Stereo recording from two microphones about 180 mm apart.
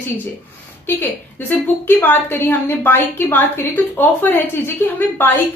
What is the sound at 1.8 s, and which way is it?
A woman's voice, 10° left (ahead or behind).